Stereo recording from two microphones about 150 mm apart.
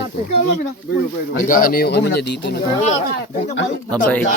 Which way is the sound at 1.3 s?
70° left (ahead or behind).